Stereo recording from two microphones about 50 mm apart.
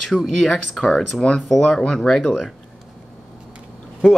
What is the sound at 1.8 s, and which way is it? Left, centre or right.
Speech, centre.